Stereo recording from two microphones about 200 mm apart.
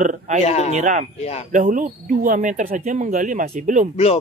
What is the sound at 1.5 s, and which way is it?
Speech, 40° right (ahead or behind).